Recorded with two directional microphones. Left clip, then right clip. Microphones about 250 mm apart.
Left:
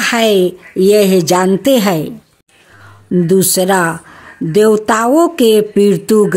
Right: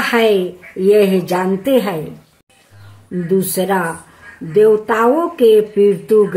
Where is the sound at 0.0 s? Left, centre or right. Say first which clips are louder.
Left 2 dB; left.